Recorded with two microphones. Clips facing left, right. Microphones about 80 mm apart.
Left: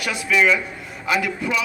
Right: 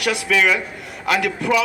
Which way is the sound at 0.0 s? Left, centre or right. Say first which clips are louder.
Right 1 dB; right.